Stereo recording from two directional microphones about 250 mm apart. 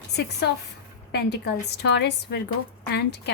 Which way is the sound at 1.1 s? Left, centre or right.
Left.